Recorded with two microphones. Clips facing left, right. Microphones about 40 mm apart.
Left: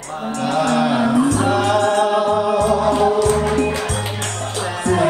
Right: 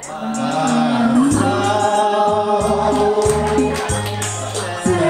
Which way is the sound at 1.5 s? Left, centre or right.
Centre.